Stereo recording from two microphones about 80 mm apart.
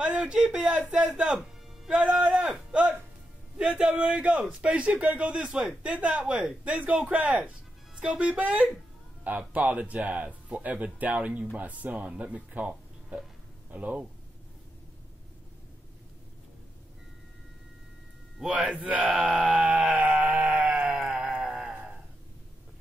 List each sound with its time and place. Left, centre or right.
0.0 s a man's voice: centre
3.5 s a man's voice: centre
18.4 s a sound: centre